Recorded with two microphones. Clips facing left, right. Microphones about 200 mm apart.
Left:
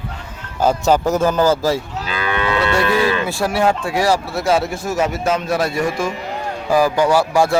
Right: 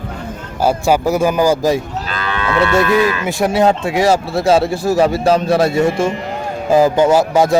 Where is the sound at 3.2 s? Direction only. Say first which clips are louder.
Right 4 dB; 20° right (ahead or behind).